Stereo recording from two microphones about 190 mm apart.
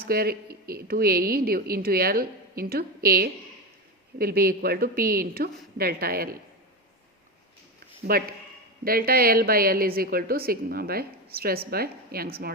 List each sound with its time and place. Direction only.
0.0 s a woman's voice: 55° right (ahead or behind)
8.0 s a woman's voice: 50° right (ahead or behind)